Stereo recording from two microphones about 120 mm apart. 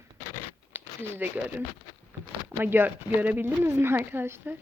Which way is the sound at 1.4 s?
10° right (ahead or behind).